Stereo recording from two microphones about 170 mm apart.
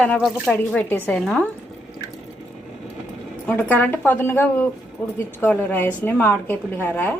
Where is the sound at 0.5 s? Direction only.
10° left (ahead or behind).